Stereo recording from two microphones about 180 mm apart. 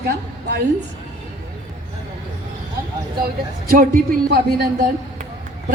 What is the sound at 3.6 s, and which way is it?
A man's voice, 55° right (ahead or behind).